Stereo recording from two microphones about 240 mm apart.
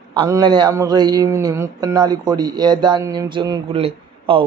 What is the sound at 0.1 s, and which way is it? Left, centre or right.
A man's voice, centre.